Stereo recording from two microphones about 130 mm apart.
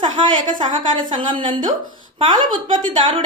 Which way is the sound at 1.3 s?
40° right (ahead or behind).